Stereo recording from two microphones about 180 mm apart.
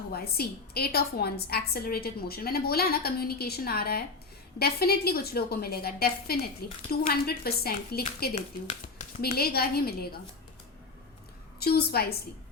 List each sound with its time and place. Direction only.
0.1 s a woman's voice: 60° left (ahead or behind)
8.4 s speech: 40° left (ahead or behind)
9.2 s a woman's voice: 60° left (ahead or behind)
11.6 s a woman's voice: 60° left (ahead or behind)